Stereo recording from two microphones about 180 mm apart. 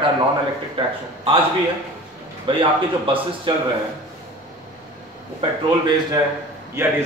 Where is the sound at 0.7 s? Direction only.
30° right (ahead or behind).